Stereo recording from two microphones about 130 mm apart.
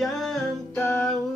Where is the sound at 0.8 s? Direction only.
20° left (ahead or behind).